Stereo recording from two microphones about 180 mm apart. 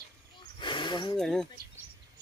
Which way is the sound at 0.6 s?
25° left (ahead or behind).